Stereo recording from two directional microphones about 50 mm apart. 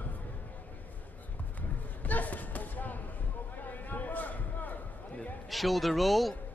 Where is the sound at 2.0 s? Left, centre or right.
Left.